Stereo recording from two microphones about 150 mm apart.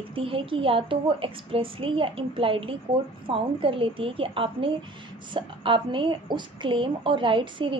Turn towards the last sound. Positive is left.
turn(degrees=-35)  # may be behind; listen again after turning